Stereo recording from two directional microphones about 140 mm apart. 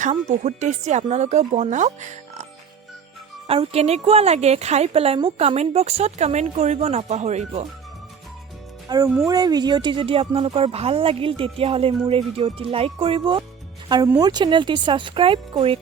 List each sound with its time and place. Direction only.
0.0 s speech: 55° right (ahead or behind)
3.4 s speech: 45° right (ahead or behind)
8.9 s speech: 25° right (ahead or behind); by 15.8 s 40° right (ahead or behind)